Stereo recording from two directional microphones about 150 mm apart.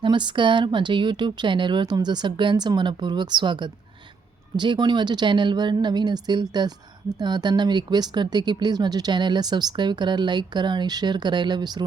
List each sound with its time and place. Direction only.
0.0 s speech: 30° right (ahead or behind)